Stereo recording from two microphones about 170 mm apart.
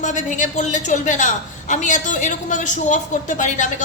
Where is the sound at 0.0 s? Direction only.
45° left (ahead or behind).